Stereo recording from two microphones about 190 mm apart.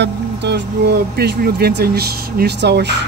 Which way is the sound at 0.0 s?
65° right (ahead or behind).